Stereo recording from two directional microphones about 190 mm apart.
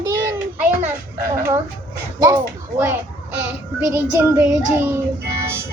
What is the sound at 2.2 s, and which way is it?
A child's voice, 20° right (ahead or behind).